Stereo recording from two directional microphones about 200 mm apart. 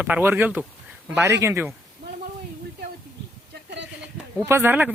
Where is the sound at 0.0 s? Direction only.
10° right (ahead or behind).